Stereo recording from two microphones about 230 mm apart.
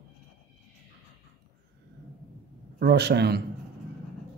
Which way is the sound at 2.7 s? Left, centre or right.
Right.